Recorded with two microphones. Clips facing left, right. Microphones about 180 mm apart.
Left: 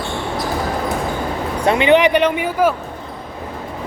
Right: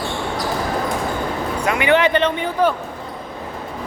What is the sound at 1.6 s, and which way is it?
Speech, 25° left (ahead or behind).